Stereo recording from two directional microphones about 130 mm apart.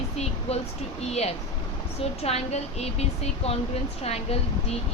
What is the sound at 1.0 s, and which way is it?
A woman's voice, 55° left (ahead or behind).